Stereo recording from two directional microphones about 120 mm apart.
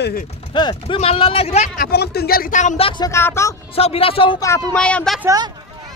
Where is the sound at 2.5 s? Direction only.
90° left.